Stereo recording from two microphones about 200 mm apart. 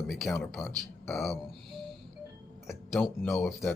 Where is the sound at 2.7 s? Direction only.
Centre (ahead or behind).